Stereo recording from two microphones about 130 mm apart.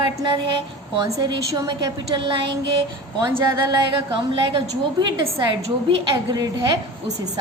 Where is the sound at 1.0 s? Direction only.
25° right (ahead or behind).